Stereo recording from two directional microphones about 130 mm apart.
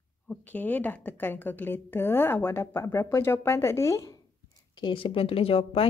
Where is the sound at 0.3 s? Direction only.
10° left (ahead or behind).